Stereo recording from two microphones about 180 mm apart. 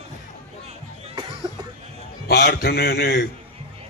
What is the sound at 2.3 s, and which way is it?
Speech, 60° left (ahead or behind).